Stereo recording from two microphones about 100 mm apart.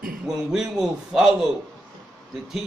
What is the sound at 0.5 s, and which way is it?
Speech, 5° right (ahead or behind).